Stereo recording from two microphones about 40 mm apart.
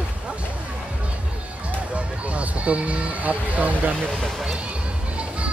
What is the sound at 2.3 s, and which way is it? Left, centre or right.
Speech, right.